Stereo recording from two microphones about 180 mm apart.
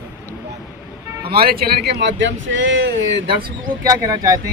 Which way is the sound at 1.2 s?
60° right (ahead or behind).